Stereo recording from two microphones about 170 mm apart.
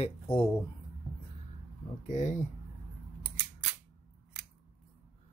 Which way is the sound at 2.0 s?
45° left (ahead or behind).